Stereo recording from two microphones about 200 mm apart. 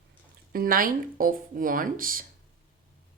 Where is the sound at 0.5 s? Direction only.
45° right (ahead or behind).